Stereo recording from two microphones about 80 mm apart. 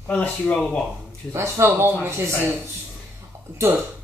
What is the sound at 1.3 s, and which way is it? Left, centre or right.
Speech, right.